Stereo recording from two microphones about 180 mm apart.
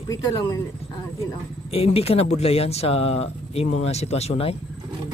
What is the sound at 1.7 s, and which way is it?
Speech, 35° left (ahead or behind).